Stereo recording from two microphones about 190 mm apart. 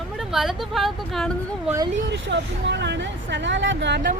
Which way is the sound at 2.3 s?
65° right (ahead or behind).